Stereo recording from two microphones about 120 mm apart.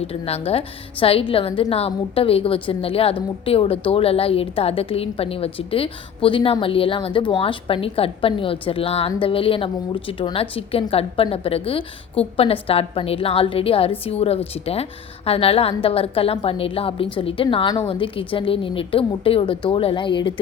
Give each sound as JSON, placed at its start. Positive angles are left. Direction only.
{"t": 0.1, "sound": "a woman's voice", "side_deg": 55}